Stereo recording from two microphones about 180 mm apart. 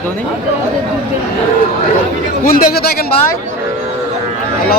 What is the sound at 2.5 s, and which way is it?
Speech, 55° left (ahead or behind).